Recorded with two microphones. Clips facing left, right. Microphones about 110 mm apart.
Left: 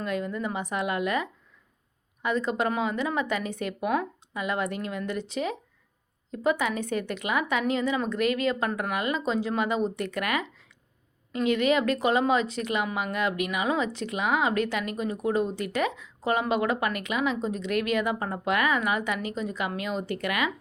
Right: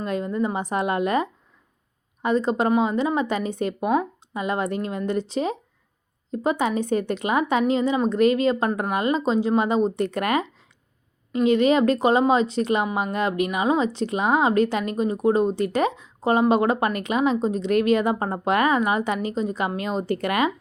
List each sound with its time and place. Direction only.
0.0 s a woman's voice: 30° right (ahead or behind)